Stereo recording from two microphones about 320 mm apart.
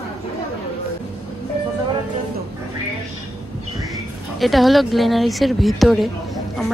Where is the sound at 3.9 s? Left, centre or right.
Centre.